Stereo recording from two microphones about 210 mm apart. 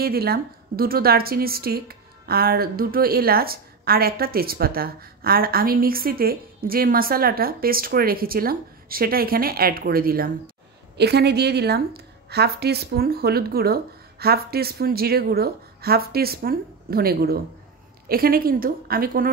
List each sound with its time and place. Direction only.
0.0 s a woman's voice: 45° right (ahead or behind)